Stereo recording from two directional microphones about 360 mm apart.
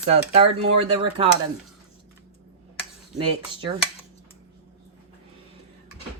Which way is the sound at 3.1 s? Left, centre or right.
Centre.